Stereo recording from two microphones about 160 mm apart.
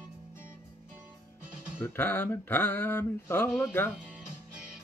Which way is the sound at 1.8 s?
10° left (ahead or behind).